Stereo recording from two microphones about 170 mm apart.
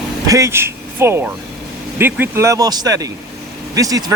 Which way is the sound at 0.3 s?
20° right (ahead or behind).